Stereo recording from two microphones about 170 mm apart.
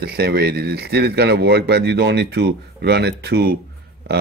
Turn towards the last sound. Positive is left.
turn(degrees=-70)  # may be behind; listen again after turning